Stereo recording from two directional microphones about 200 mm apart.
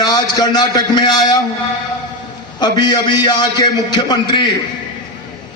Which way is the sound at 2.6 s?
20° left (ahead or behind).